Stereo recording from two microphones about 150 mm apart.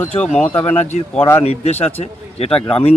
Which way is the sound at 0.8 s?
45° left (ahead or behind).